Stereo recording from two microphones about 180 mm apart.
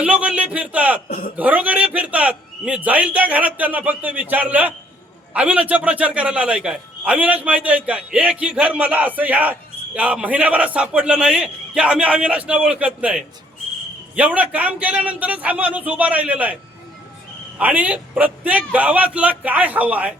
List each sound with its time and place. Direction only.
0.0 s speech: 5° right (ahead or behind)
1.0 s speech: 50° left (ahead or behind)
1.4 s speech: 10° right (ahead or behind)
17.6 s speech: 10° right (ahead or behind)